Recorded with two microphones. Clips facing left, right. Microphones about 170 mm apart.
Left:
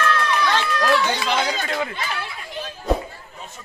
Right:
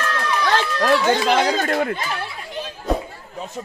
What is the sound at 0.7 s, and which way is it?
Speech, 25° right (ahead or behind).